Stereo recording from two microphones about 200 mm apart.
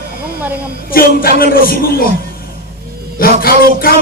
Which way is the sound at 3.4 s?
50° left (ahead or behind).